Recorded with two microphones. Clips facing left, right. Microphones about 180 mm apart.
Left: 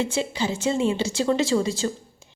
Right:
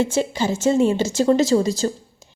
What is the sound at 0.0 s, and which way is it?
A woman's voice, 45° right (ahead or behind).